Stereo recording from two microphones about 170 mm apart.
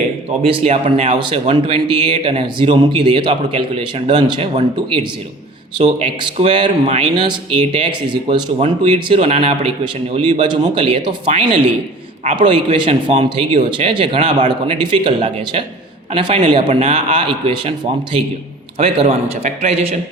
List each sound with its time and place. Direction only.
0.4 s speech: 35° right (ahead or behind)
5.7 s speech: 35° right (ahead or behind)
18.8 s speech: 35° right (ahead or behind)